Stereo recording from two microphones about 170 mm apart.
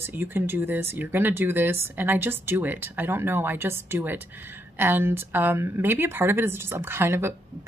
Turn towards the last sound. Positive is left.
turn(degrees=-15)  # may be behind; listen again after turning